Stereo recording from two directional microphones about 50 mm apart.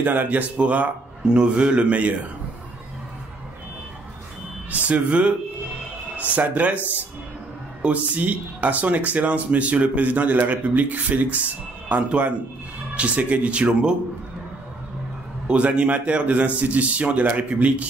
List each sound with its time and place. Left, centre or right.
0.0 s speech: right
1.2 s a man's voice: centre
4.6 s a man's voice: right
7.8 s a man's voice: right
15.4 s a man's voice: right